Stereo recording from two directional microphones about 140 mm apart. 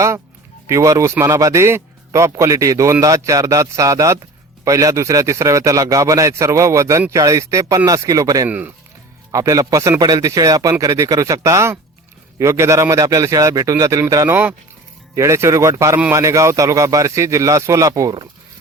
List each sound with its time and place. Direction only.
0.7 s a man's voice: 25° right (ahead or behind)
8.4 s speech: 10° right (ahead or behind)
9.3 s a man's voice: 25° right (ahead or behind)